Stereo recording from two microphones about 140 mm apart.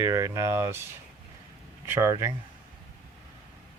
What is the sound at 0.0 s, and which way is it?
Speech, 25° right (ahead or behind).